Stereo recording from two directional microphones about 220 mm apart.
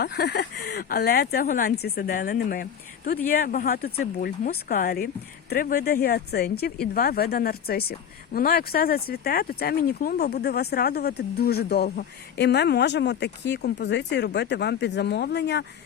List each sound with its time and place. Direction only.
0.0 s speech: 45° left (ahead or behind)